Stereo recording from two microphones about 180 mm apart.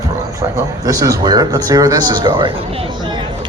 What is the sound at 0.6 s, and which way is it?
Speech, 20° right (ahead or behind).